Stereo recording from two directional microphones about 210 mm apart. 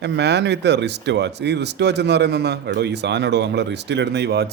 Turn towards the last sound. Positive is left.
turn(degrees=-50)  # may be behind; listen again after turning